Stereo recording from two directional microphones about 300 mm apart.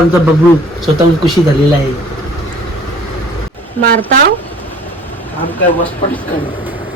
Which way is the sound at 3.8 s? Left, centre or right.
Right.